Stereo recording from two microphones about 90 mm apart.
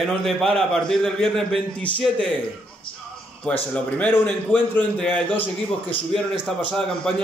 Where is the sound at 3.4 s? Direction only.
15° left (ahead or behind).